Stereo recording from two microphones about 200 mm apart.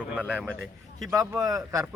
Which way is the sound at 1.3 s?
15° right (ahead or behind).